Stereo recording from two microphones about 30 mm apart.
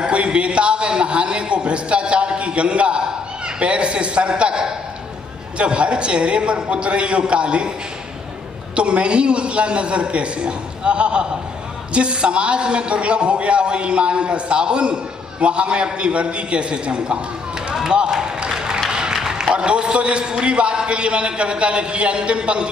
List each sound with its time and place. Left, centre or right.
0.0 s a man's voice: right
8.7 s a man's voice: right
18.5 s a sound: right
19.5 s a man's voice: right